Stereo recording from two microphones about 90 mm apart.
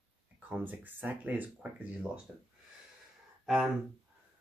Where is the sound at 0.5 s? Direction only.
20° right (ahead or behind).